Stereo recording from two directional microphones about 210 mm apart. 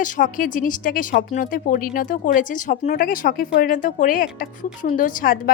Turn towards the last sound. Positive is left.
turn(degrees=40)  # may be behind; listen again after turning